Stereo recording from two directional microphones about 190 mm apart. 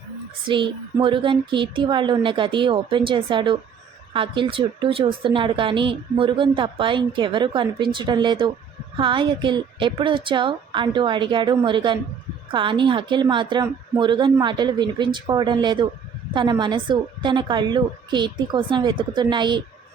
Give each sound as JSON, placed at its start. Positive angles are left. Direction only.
{"t": 0.4, "sound": "a woman's voice", "side_deg": -25}